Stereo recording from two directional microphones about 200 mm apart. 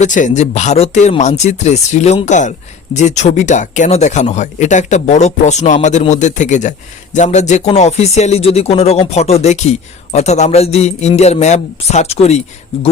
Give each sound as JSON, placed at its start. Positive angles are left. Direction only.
{"t": 0.0, "sound": "speech", "side_deg": 35}